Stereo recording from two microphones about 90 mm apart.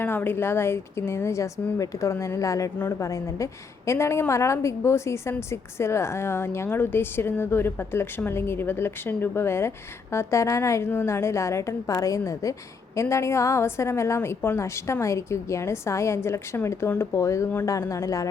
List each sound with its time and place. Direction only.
0.0 s a woman's voice: 25° left (ahead or behind); by 18.3 s 40° left (ahead or behind)